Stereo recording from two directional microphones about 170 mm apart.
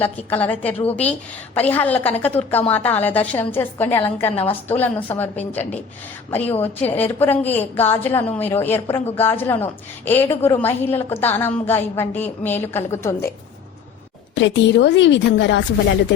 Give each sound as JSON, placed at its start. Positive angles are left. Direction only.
{"t": 0.0, "sound": "a woman's voice", "side_deg": 10}
{"t": 14.3, "sound": "a woman's voice", "side_deg": 90}